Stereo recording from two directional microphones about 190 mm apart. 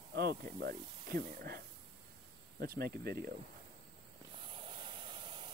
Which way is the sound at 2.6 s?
50° right (ahead or behind).